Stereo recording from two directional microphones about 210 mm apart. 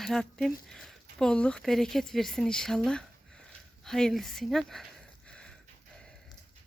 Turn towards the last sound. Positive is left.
turn(degrees=5)  # may be behind; listen again after turning